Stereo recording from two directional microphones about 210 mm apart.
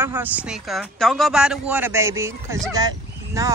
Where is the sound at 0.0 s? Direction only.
10° right (ahead or behind).